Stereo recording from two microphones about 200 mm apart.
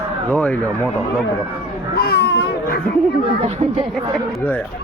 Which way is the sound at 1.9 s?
55° left (ahead or behind).